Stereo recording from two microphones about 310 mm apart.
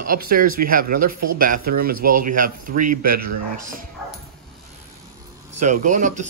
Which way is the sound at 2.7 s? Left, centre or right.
Right.